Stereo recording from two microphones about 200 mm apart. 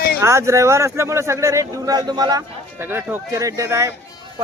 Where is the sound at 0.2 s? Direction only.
15° right (ahead or behind).